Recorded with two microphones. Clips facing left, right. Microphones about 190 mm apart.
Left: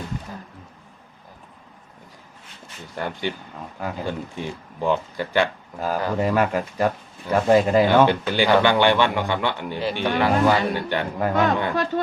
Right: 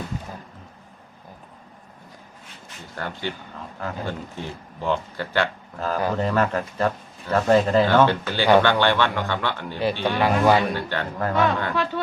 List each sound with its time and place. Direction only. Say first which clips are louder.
2.9 s speech: left 3 dB; 15° left (ahead or behind)
10.2 s a man's voice: left 1 dB; 15° right (ahead or behind)
10.8 s speech: left 2 dB; 15° left (ahead or behind)
11.7 s speech: left 2 dB; 45° left (ahead or behind)